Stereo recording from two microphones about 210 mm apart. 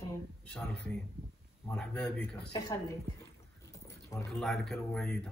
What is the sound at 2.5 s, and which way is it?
Speech, 15° left (ahead or behind).